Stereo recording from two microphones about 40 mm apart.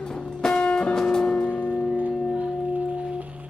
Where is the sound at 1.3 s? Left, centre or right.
Left.